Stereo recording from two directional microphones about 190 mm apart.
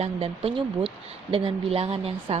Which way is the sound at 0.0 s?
30° right (ahead or behind).